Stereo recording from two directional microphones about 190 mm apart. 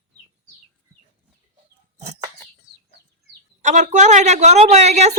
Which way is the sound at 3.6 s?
40° right (ahead or behind).